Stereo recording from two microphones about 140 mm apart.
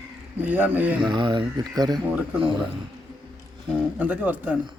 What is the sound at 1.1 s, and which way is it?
Speech, 35° right (ahead or behind).